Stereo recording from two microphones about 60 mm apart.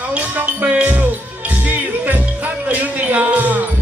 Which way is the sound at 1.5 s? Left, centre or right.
Right.